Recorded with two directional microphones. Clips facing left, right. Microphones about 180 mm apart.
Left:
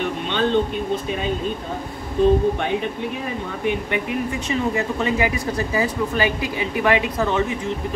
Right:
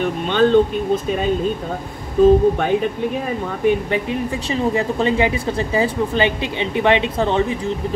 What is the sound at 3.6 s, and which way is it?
Speech, 30° right (ahead or behind).